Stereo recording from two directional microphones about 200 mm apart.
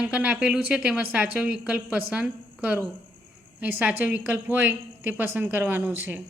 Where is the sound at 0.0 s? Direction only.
5° right (ahead or behind).